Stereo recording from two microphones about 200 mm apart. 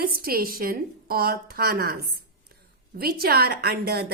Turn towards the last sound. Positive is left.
turn(degrees=-50)  # may be behind; listen again after turning